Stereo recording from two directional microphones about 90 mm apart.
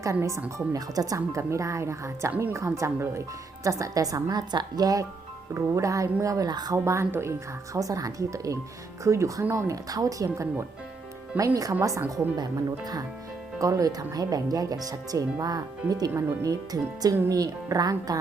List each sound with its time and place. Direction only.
0.0 s speech: 35° right (ahead or behind)
6.7 s speech: 30° right (ahead or behind); by 18.2 s 45° right (ahead or behind)